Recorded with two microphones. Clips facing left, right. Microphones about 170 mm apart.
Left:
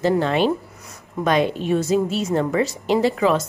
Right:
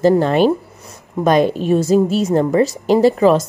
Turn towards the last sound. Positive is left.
turn(degrees=-40)  # may be behind; listen again after turning